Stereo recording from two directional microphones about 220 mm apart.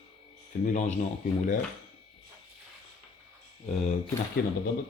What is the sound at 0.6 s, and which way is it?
Speech, 35° left (ahead or behind).